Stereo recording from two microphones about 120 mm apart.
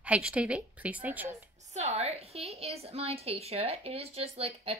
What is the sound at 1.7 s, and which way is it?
A woman's voice, 65° right (ahead or behind).